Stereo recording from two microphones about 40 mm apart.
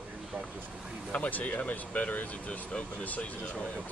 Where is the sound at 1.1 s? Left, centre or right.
Left.